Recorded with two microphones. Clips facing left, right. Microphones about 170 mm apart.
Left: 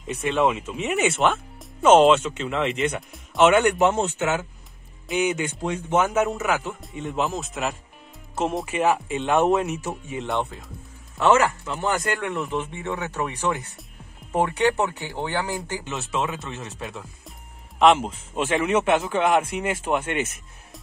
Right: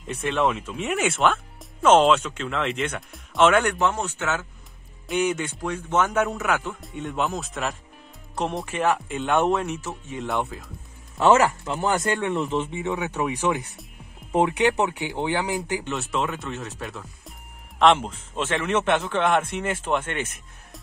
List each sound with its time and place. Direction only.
0.0 s speech: centre (ahead or behind); by 4.5 s 15° left (ahead or behind)
5.0 s speech: 5° left (ahead or behind)
5.6 s speech: 20° left (ahead or behind)
5.9 s speech: 5° left (ahead or behind)
10.2 s speech: centre (ahead or behind)
11.2 s speech: 30° right (ahead or behind)
15.8 s speech: centre (ahead or behind)